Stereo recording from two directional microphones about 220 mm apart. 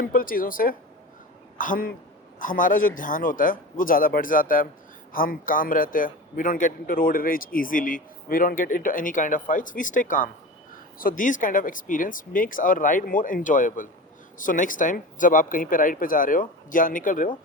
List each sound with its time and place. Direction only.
0.0 s a man's voice: 40° left (ahead or behind)